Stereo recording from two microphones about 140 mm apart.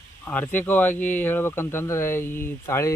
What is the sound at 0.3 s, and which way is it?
Speech, 15° left (ahead or behind).